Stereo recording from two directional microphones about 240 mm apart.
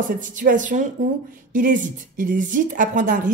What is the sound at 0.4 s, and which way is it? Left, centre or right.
A woman's voice, right.